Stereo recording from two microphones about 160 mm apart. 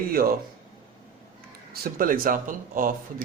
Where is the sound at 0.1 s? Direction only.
65° right (ahead or behind).